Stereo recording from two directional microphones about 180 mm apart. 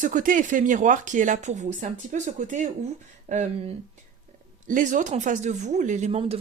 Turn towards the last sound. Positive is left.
turn(degrees=-35)  # may be behind; listen again after turning